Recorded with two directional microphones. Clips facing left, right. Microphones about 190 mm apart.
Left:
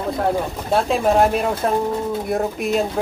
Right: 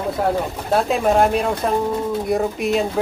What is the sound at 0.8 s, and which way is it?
Speech, centre (ahead or behind).